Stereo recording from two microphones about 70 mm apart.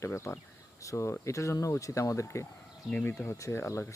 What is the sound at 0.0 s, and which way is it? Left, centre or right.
Speech, left.